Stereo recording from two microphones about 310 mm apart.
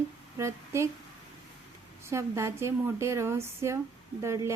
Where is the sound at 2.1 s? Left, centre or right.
Centre.